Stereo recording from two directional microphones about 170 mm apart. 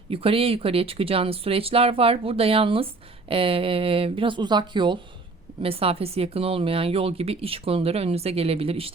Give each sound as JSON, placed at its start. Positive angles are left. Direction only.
{"t": 0.1, "sound": "speech", "side_deg": -35}